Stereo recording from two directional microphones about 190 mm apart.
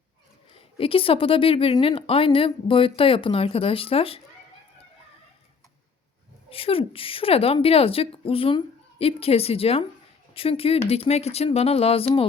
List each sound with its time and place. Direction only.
0.5 s speech: 30° left (ahead or behind)
6.5 s speech: 30° left (ahead or behind)